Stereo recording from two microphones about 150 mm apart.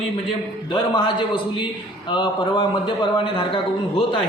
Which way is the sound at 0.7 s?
30° left (ahead or behind).